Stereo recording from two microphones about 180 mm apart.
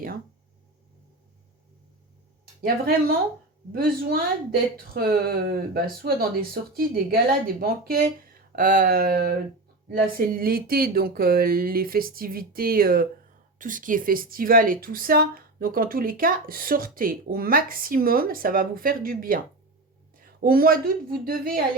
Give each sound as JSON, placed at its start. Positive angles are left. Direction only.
{"t": 2.6, "sound": "speech", "side_deg": -55}